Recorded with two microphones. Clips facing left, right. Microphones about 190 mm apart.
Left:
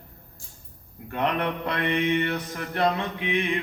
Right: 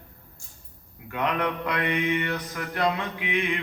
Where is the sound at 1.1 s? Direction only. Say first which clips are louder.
Left 1 dB; 30° left (ahead or behind).